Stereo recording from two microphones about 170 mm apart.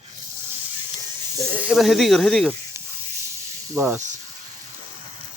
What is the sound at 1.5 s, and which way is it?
Speech, 5° right (ahead or behind).